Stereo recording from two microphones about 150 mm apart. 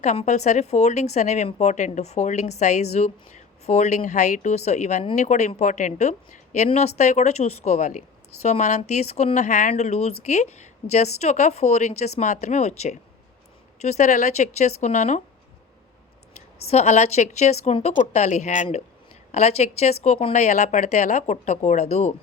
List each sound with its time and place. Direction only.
0.0 s speech: 50° left (ahead or behind)
16.6 s speech: 45° left (ahead or behind)